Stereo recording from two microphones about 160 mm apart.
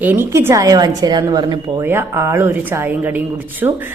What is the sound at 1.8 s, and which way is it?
Speech, 15° right (ahead or behind).